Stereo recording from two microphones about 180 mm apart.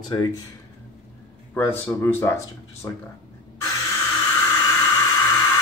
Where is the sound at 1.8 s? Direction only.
10° left (ahead or behind).